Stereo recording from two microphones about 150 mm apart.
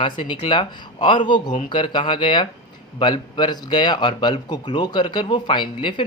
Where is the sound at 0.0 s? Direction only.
35° left (ahead or behind).